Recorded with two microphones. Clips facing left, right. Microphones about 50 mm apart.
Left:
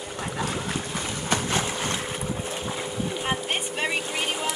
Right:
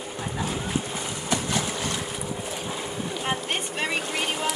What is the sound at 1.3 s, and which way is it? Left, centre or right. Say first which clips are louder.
Boat: left 1 dB; left.